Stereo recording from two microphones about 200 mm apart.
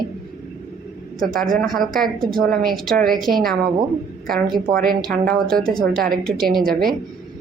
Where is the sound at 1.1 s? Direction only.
45° right (ahead or behind).